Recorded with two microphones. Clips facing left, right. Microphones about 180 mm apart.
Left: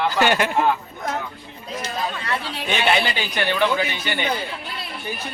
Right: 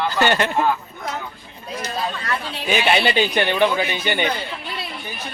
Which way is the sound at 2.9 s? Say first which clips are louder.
Right 6 dB; 20° right (ahead or behind).